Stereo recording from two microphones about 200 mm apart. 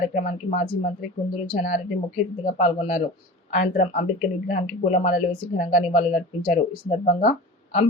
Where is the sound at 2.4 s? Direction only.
35° left (ahead or behind).